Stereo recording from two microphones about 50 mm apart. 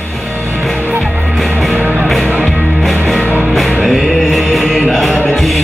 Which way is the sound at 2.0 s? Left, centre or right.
Centre.